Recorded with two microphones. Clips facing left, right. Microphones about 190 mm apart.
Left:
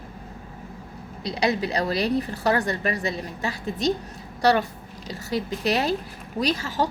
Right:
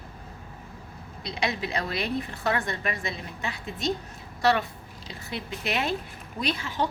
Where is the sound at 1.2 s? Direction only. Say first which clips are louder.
Left 6 dB; 35° left (ahead or behind).